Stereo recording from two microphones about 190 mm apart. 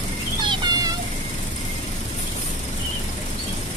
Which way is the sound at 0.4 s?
25° right (ahead or behind).